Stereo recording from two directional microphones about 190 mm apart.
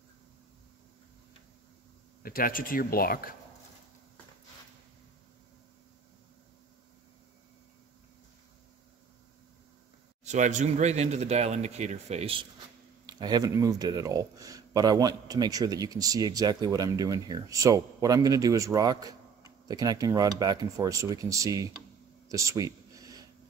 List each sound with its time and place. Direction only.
2.2 s speech: 50° left (ahead or behind)
10.2 s speech: 40° right (ahead or behind)
13.0 s speech: 20° right (ahead or behind)
22.3 s a sound: 15° right (ahead or behind)